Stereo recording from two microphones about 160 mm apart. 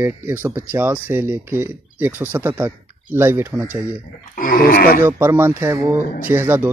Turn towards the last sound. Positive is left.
turn(degrees=-10)  # may be behind; listen again after turning